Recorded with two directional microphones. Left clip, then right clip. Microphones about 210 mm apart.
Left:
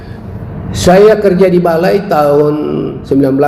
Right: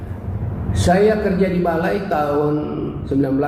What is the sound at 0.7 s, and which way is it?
A man's voice, 45° left (ahead or behind).